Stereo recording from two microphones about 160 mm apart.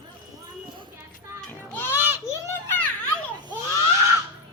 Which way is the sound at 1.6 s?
15° left (ahead or behind).